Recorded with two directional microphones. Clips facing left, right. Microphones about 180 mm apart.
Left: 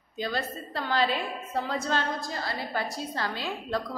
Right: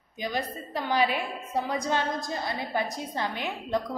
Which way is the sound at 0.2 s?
15° right (ahead or behind).